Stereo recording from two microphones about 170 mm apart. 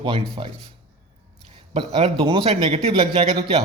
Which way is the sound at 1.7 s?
30° right (ahead or behind).